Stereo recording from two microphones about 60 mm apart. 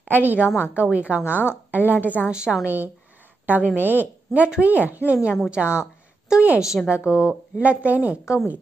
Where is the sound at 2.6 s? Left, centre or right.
Right.